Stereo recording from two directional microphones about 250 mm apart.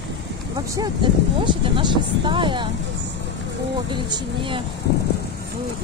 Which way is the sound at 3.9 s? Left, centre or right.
Centre.